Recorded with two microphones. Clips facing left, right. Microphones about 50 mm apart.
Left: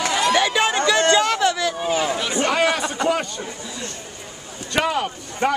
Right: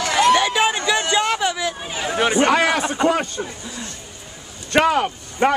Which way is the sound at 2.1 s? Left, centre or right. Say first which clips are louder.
Right 5 dB; right.